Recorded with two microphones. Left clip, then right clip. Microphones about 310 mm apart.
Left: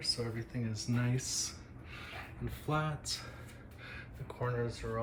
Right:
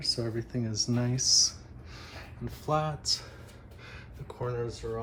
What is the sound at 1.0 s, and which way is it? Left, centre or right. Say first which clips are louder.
Speech: right 12 dB; centre.